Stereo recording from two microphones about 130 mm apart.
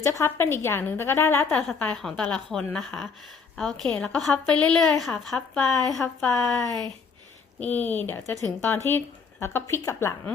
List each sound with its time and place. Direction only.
0.0 s a woman's voice: 20° left (ahead or behind)
1.5 s a woman's voice: 5° left (ahead or behind)
7.6 s a woman's voice: 15° left (ahead or behind)